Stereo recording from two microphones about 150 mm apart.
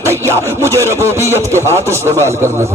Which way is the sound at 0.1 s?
20° right (ahead or behind).